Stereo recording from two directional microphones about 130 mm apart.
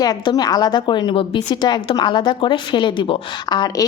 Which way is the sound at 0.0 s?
30° left (ahead or behind).